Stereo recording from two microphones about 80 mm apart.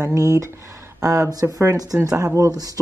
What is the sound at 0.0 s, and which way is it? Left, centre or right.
Speech, right.